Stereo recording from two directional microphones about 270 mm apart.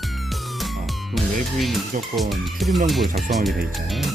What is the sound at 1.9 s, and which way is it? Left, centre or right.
Speech, right.